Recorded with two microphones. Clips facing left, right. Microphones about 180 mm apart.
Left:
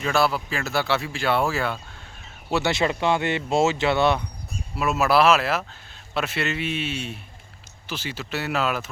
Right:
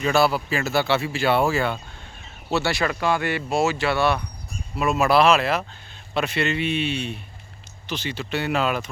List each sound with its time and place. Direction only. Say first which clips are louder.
0.0 s speech: right 3 dB; centre (ahead or behind)
2.5 s speech: left 1 dB; 15° left (ahead or behind)
4.7 s speech: right 1 dB; 5° left (ahead or behind)